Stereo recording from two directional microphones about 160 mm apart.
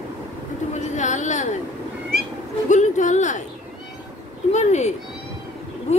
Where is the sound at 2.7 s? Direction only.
50° left (ahead or behind).